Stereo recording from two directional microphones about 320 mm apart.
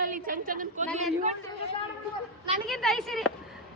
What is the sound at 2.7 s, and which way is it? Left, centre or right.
Speech, centre.